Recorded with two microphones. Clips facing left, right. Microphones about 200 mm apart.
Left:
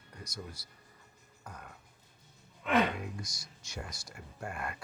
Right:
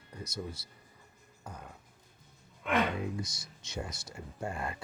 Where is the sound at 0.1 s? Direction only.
25° right (ahead or behind).